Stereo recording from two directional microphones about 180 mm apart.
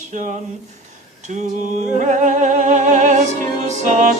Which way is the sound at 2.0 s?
40° right (ahead or behind).